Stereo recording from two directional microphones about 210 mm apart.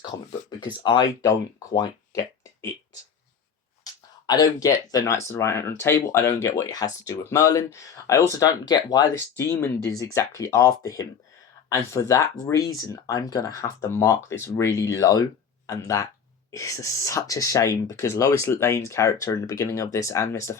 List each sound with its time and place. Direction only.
0.6 s speech: 20° left (ahead or behind)
3.9 s a sound: 20° left (ahead or behind)
4.3 s speech: 20° left (ahead or behind)